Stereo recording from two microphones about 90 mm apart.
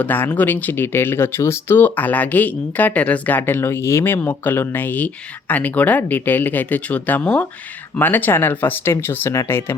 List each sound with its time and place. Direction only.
0.0 s speech: 20° left (ahead or behind)